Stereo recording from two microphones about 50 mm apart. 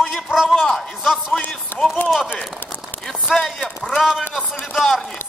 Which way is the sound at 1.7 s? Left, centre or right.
Left.